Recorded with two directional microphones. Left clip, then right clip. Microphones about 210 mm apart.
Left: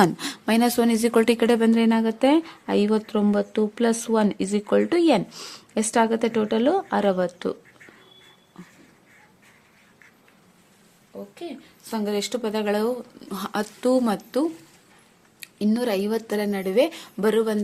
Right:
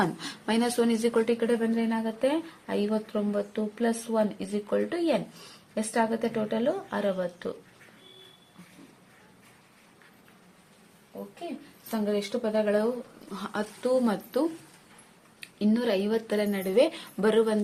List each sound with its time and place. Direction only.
0.0 s speech: 35° left (ahead or behind)
11.9 s speech: 40° left (ahead or behind); by 17.6 s 25° left (ahead or behind)